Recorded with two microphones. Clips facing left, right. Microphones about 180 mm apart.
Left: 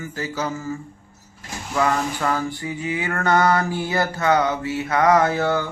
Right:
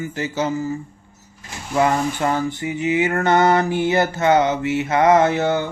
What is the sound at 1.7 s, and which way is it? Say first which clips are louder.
Music: right 3 dB; 25° right (ahead or behind).